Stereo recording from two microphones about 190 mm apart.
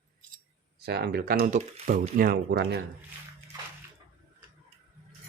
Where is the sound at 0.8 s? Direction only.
55° right (ahead or behind).